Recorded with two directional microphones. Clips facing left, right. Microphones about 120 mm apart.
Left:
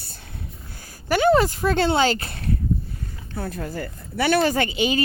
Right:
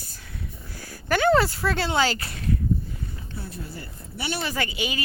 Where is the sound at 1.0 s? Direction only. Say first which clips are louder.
Left 2 dB; 15° left (ahead or behind); by 2.6 s 35° left (ahead or behind).